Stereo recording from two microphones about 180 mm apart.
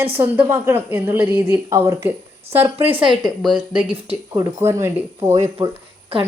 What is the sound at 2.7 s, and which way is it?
Speech, 30° right (ahead or behind).